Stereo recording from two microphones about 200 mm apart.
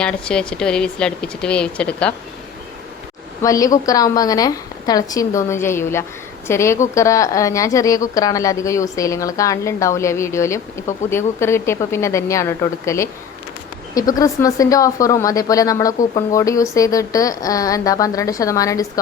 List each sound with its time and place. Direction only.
0.0 s a woman's voice: 5° left (ahead or behind)
3.4 s a woman's voice: 15° left (ahead or behind)